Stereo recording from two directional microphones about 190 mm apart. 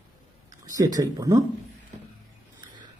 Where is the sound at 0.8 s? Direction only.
20° right (ahead or behind).